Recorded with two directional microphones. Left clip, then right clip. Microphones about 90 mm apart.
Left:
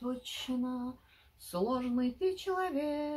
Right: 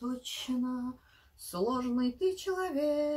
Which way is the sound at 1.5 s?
15° right (ahead or behind).